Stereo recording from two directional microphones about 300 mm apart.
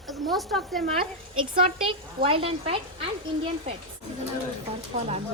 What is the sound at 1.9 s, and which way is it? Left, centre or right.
Speech, centre.